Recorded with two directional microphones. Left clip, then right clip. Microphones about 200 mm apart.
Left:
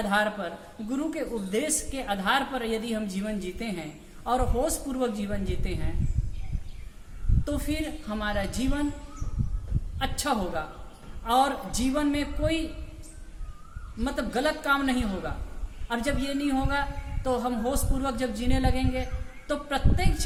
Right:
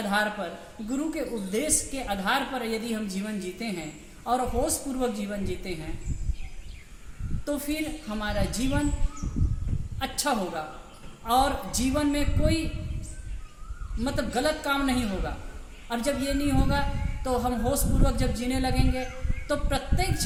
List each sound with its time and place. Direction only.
0.0 s a woman's voice: centre (ahead or behind)
7.4 s a woman's voice: 5° left (ahead or behind)
10.0 s a woman's voice: centre (ahead or behind)
14.0 s a woman's voice: 5° left (ahead or behind)